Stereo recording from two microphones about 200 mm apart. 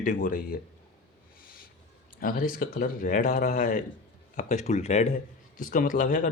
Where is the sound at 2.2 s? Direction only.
45° left (ahead or behind).